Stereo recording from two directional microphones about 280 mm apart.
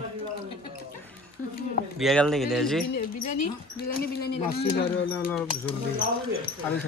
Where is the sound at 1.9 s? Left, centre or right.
Centre.